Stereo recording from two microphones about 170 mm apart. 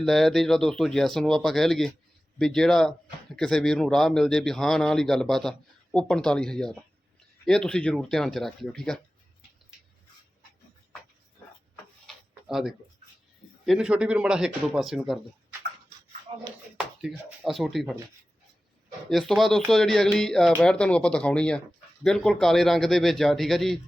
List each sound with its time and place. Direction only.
0.0 s speech: centre (ahead or behind)
12.0 s a sound: centre (ahead or behind)
13.7 s speech: 5° right (ahead or behind)
16.3 s a sound: 30° right (ahead or behind)
16.7 s speech: 5° right (ahead or behind)
19.0 s speech: centre (ahead or behind)